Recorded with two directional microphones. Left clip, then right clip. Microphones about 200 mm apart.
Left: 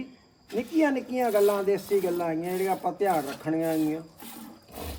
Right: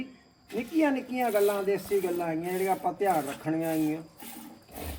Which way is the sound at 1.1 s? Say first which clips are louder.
Left 3 dB; centre (ahead or behind).